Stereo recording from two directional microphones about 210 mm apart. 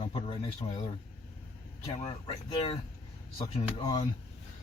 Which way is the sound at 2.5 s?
25° left (ahead or behind).